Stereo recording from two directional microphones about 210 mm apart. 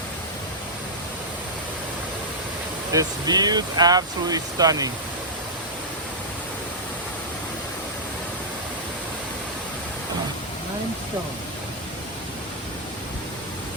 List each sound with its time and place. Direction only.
2.9 s speech: 15° right (ahead or behind)